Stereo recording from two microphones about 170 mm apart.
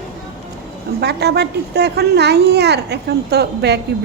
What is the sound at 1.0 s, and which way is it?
Speech, 75° right (ahead or behind).